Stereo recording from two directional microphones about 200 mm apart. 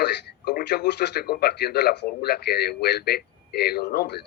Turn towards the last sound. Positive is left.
turn(degrees=55)  # may be behind; listen again after turning